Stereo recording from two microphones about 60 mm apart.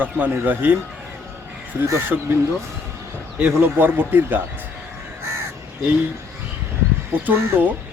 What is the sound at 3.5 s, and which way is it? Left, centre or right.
Speech, right.